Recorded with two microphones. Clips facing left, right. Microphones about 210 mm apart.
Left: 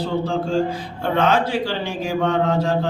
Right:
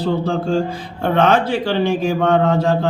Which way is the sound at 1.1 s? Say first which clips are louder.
Right 3 dB; 60° right (ahead or behind).